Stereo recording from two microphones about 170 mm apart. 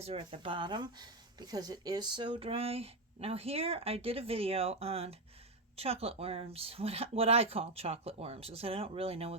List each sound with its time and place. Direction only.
0.0 s speech: 35° right (ahead or behind)